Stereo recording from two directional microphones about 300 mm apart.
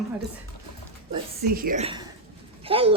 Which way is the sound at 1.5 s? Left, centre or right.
Right.